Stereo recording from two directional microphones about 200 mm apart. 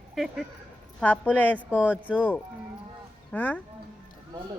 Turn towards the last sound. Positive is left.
turn(degrees=5)  # may be behind; listen again after turning